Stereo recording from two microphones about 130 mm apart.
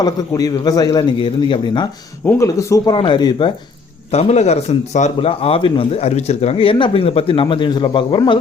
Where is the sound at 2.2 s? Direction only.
20° left (ahead or behind).